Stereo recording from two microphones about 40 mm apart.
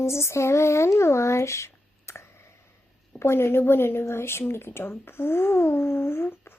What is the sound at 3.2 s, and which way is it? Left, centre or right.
Speech, left.